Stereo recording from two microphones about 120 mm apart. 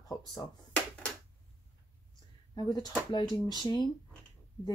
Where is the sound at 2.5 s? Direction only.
35° left (ahead or behind).